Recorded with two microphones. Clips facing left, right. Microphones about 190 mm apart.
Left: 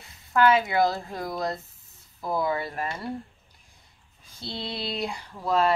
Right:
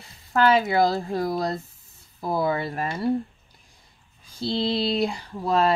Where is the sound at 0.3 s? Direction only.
35° right (ahead or behind).